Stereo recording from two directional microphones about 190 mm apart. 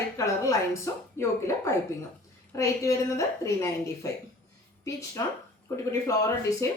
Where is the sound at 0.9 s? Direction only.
15° left (ahead or behind).